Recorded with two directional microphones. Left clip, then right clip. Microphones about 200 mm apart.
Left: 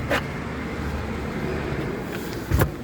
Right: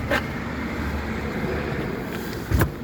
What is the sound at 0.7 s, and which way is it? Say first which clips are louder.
Train: right 1 dB; 50° left (ahead or behind).